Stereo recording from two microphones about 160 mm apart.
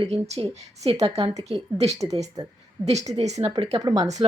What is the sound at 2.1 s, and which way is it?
Speech, 20° right (ahead or behind).